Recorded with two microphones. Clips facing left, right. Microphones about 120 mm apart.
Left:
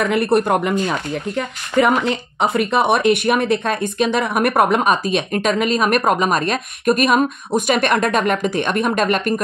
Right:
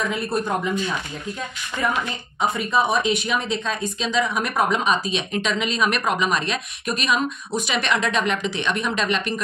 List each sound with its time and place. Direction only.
0.0 s speech: 65° left (ahead or behind); by 9.3 s 50° left (ahead or behind)